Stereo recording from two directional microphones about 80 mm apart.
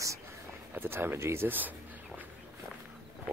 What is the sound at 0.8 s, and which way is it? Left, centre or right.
Speech, right.